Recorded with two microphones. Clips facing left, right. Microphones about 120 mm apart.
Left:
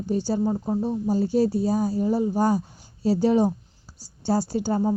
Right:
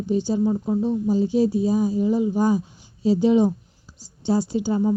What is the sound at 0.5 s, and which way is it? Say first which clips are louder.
Speech: right 3 dB; 15° left (ahead or behind).